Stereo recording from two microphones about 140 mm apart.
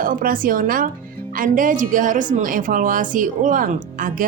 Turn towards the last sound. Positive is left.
turn(degrees=-80)